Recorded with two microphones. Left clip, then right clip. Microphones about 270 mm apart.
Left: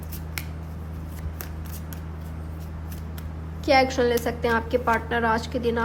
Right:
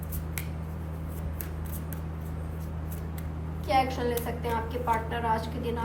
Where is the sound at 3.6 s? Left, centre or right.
Left.